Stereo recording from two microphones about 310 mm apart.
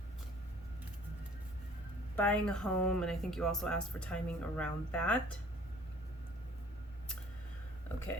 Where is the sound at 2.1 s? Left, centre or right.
Centre.